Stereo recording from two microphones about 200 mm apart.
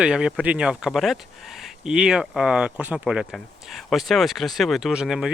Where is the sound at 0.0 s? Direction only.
5° right (ahead or behind).